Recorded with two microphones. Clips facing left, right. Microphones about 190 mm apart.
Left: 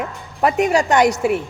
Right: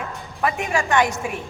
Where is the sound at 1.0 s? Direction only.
75° left (ahead or behind).